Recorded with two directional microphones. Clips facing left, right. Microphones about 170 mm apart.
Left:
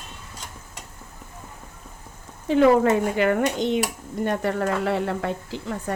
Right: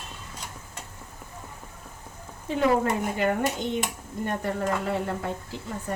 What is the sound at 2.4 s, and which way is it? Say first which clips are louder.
Speech: left 7 dB; 90° left.